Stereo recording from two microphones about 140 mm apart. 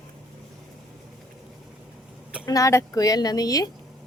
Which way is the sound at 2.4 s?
25° left (ahead or behind).